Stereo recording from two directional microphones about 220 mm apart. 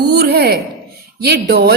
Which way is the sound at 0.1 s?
45° right (ahead or behind).